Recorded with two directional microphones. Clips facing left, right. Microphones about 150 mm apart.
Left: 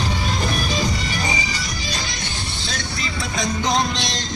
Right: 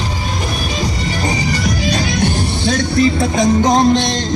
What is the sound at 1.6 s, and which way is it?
Music, 60° right (ahead or behind).